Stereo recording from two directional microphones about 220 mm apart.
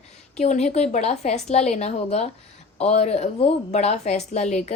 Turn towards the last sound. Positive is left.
turn(degrees=30)  # may be behind; listen again after turning